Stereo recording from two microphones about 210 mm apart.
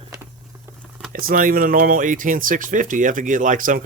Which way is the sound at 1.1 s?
45° right (ahead or behind).